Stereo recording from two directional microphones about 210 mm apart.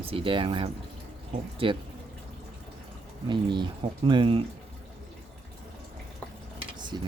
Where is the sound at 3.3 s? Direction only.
20° right (ahead or behind).